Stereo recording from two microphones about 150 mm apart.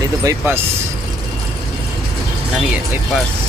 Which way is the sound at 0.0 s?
20° right (ahead or behind).